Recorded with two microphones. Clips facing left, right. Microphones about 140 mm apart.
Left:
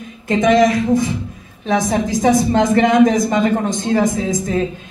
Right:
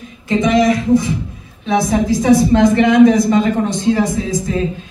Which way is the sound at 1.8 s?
45° left (ahead or behind).